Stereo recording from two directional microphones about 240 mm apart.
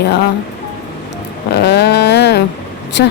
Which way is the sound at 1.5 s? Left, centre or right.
Left.